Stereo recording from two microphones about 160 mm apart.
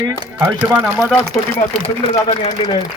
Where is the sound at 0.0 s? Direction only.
15° right (ahead or behind).